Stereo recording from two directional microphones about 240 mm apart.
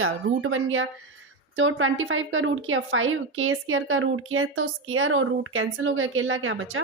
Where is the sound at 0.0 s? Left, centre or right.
Right.